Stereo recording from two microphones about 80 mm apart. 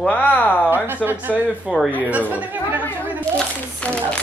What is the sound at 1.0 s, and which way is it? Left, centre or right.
Speech, right.